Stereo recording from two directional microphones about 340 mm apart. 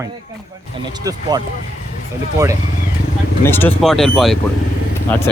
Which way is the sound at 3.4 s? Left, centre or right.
Centre.